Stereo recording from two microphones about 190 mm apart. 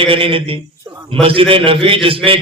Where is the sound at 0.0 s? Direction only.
30° right (ahead or behind).